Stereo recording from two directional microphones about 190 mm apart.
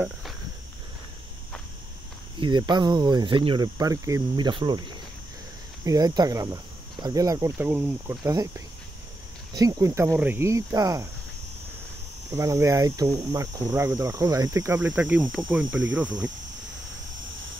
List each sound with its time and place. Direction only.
2.3 s speech: 25° right (ahead or behind)
12.3 s speech: 15° right (ahead or behind)
14.9 s speech: 5° right (ahead or behind)